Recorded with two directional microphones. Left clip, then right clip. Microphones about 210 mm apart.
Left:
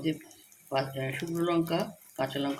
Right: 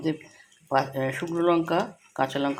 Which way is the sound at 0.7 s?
25° right (ahead or behind).